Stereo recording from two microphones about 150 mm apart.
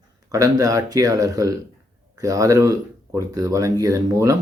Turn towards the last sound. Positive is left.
turn(degrees=-20)  # may be behind; listen again after turning